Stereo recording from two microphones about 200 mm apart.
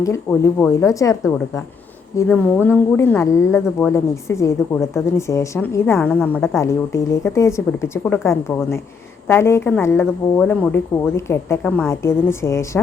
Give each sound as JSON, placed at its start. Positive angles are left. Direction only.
{"t": 0.0, "sound": "speech", "side_deg": 15}
{"t": 2.1, "sound": "speech", "side_deg": 10}